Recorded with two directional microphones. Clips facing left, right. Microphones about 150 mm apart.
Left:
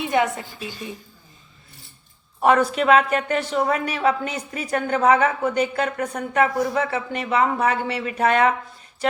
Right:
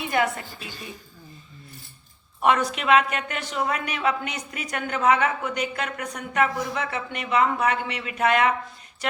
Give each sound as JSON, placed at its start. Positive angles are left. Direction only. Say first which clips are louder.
{"t": 0.1, "sound": "a woman's voice", "louder": "left 2 dB", "side_deg": 25}
{"t": 2.4, "sound": "a woman's voice", "louder": "left 4 dB", "side_deg": 35}